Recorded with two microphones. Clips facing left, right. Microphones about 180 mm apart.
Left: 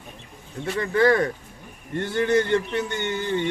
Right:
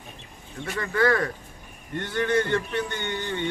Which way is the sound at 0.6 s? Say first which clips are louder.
Left 4 dB; 25° left (ahead or behind).